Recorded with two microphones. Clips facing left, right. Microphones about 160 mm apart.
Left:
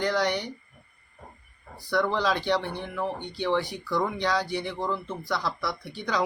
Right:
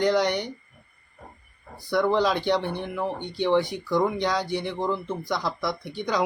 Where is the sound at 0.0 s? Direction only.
15° right (ahead or behind).